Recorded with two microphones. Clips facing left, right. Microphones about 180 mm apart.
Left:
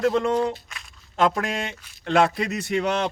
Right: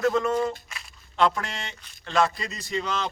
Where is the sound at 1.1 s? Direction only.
50° left (ahead or behind).